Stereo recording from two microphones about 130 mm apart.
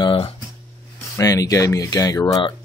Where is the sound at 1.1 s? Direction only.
25° left (ahead or behind).